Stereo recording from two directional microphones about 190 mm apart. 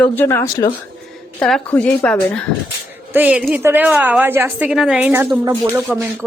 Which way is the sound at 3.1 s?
10° right (ahead or behind).